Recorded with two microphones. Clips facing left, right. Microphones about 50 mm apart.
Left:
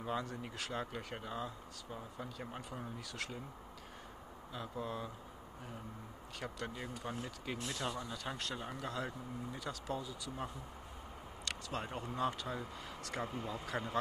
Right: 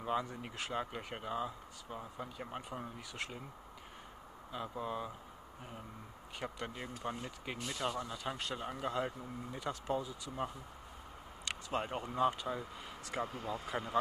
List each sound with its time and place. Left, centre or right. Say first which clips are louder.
0.0 s speech: right 3 dB; centre
4.5 s speech: right 2 dB; centre
6.4 s speech: right 1 dB; centre
7.6 s speech: right 4 dB; centre
8.6 s speech: right 4 dB; right
11.4 s speech: right 4 dB; right; by 13.9 s centre